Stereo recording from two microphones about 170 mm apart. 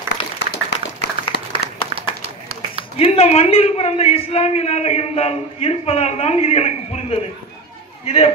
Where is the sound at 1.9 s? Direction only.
35° right (ahead or behind).